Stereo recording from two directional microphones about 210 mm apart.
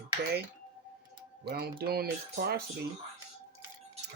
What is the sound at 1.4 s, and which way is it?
Speech, 50° right (ahead or behind).